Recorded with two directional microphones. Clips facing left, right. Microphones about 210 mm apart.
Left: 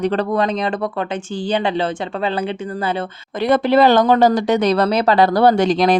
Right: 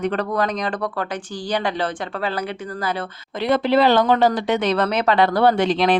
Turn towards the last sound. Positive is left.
turn(degrees=40)  # may be behind; listen again after turning